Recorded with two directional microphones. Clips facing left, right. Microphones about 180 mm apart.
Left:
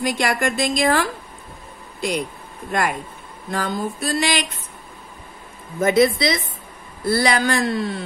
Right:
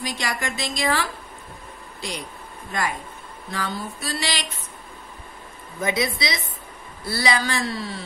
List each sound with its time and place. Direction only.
0.0 s a woman's voice: 55° left (ahead or behind)
3.5 s a woman's voice: 45° left (ahead or behind)
5.8 s a woman's voice: 50° left (ahead or behind)